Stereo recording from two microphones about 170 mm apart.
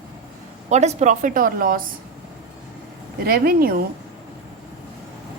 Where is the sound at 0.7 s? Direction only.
40° right (ahead or behind); by 1.8 s 55° right (ahead or behind).